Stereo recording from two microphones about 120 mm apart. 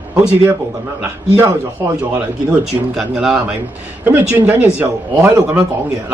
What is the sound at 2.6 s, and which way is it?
Speech, 5° right (ahead or behind).